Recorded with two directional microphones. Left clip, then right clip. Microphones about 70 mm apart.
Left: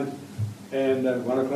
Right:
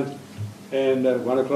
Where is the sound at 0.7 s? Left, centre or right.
Right.